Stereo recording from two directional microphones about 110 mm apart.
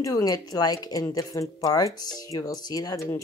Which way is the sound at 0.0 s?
35° left (ahead or behind).